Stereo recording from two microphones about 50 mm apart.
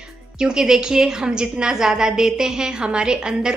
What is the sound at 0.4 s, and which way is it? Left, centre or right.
A woman's voice, centre.